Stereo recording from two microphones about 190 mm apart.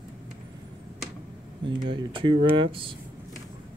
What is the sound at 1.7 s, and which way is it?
Speech, 25° right (ahead or behind).